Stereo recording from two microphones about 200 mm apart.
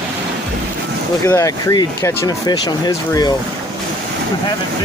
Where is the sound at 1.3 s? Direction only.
15° left (ahead or behind).